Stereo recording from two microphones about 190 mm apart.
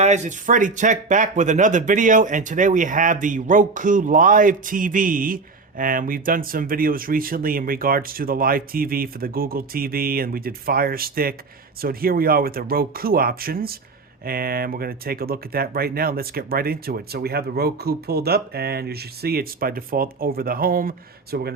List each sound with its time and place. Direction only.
0.0 s speech: 40° right (ahead or behind)